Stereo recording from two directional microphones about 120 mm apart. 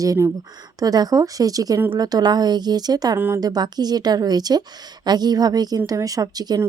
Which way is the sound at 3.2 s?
20° right (ahead or behind).